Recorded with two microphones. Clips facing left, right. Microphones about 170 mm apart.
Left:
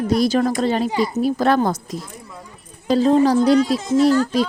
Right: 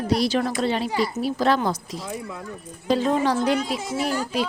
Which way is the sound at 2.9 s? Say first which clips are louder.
Left 9 dB; 35° left (ahead or behind).